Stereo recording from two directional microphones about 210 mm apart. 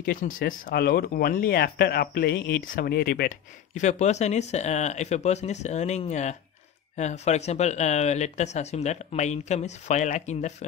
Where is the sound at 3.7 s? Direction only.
35° left (ahead or behind).